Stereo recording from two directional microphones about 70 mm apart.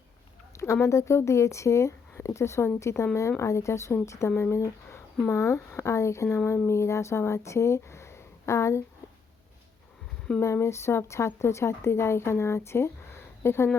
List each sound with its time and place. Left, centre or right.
0.5 s speech: left
10.4 s speech: left